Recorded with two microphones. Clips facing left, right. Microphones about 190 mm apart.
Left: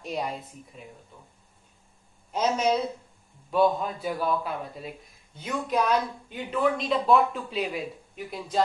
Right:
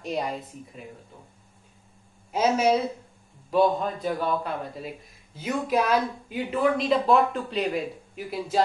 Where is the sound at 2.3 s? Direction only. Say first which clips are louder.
Right 3 dB; 10° right (ahead or behind).